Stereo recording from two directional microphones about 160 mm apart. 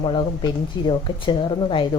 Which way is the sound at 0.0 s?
30° left (ahead or behind).